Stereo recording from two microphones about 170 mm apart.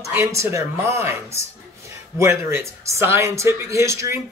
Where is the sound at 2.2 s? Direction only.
15° right (ahead or behind).